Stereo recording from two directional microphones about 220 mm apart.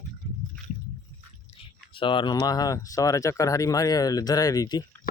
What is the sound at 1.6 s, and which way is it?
Speech, 25° left (ahead or behind).